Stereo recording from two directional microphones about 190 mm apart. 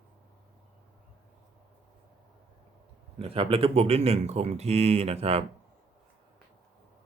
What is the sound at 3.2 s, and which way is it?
Speech, 30° right (ahead or behind).